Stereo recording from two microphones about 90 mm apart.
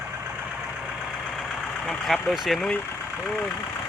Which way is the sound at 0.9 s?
Centre (ahead or behind).